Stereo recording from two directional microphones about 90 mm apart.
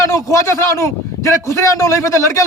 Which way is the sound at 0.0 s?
35° left (ahead or behind).